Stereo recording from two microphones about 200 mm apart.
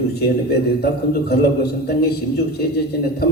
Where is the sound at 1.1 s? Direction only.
50° left (ahead or behind).